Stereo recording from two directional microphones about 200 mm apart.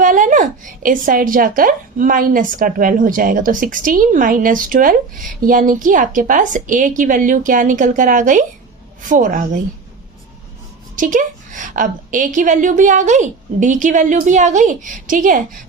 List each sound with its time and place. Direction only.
0.0 s a woman's voice: 40° right (ahead or behind)
10.9 s a woman's voice: 40° right (ahead or behind)